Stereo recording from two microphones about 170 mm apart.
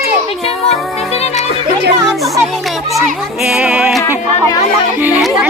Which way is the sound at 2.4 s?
Centre (ahead or behind).